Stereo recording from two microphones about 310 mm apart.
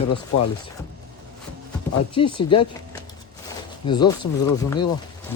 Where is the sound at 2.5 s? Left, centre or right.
Centre.